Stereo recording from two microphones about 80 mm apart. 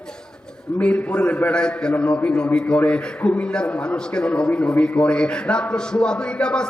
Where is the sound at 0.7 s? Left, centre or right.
Centre.